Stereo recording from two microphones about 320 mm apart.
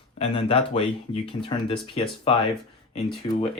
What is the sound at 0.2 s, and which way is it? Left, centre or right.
Speech, centre.